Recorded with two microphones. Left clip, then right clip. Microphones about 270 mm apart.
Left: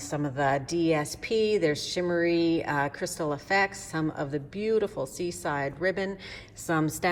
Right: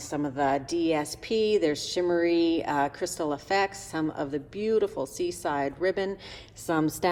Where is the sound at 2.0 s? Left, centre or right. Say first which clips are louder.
Right 2 dB; right.